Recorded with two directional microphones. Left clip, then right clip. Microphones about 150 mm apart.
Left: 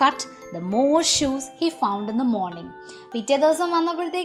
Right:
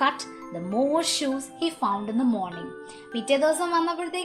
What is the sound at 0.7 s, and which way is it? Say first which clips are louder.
A woman's voice: left 5 dB; 35° left (ahead or behind).